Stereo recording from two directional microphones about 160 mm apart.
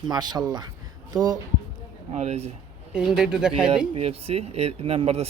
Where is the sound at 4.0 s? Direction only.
40° right (ahead or behind).